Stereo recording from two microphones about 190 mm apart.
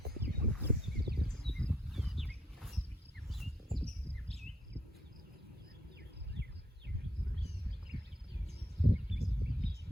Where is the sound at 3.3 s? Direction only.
Centre (ahead or behind).